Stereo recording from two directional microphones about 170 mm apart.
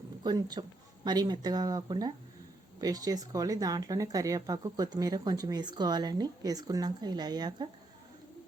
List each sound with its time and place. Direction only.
0.2 s speech: 25° right (ahead or behind)